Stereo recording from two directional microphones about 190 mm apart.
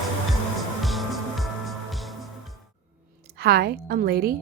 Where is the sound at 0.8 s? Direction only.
Centre (ahead or behind).